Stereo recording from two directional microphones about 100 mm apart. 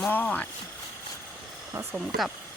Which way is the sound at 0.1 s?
15° left (ahead or behind).